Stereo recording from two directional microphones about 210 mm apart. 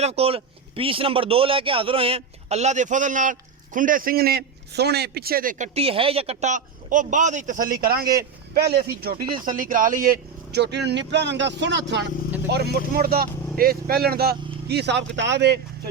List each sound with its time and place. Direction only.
0.0 s a man's voice: 30° right (ahead or behind); by 15.5 s 55° right (ahead or behind)